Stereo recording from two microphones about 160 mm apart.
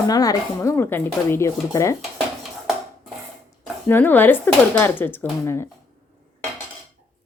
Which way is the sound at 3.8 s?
10° left (ahead or behind).